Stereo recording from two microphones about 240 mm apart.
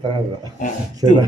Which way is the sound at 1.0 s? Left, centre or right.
Centre.